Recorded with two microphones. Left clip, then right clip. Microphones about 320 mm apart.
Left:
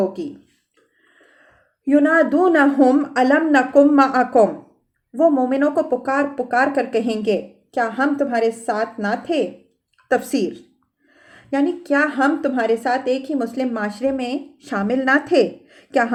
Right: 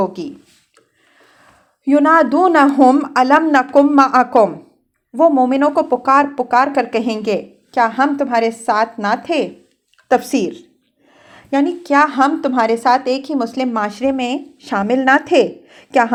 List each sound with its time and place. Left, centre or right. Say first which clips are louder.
1.9 s a woman's voice: right 4 dB; centre